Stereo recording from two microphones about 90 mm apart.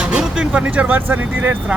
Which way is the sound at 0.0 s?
10° right (ahead or behind).